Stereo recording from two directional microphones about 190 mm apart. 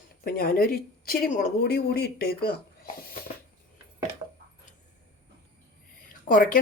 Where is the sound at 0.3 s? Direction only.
50° left (ahead or behind).